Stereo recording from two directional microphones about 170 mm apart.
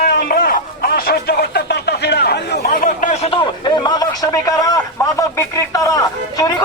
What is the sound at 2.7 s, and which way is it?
Speech, 50° left (ahead or behind).